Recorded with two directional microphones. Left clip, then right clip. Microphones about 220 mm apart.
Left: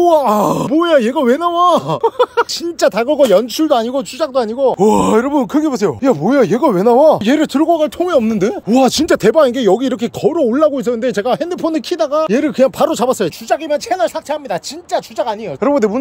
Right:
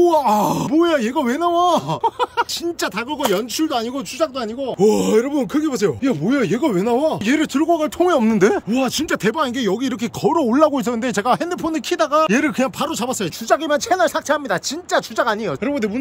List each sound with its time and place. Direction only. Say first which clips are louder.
0.0 s speech: left 4 dB; 15° left (ahead or behind)
8.6 s speech: left 9 dB; 30° left (ahead or behind)
10.3 s speech: left 1 dB; centre (ahead or behind)
13.5 s speech: right 1 dB; centre (ahead or behind)
15.6 s speech: left 9 dB; 20° left (ahead or behind)